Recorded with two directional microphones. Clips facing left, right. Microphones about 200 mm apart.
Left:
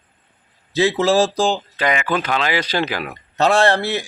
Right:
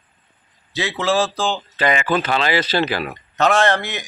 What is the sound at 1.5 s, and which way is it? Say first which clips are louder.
Speech: right 1 dB; 10° left (ahead or behind).